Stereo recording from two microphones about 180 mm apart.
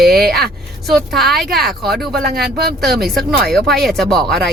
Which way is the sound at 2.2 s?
60° right (ahead or behind).